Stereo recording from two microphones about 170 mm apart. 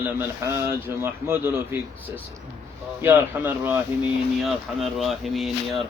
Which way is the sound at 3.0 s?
15° right (ahead or behind).